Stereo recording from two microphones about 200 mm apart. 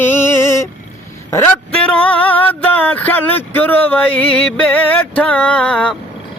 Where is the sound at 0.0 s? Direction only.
10° left (ahead or behind).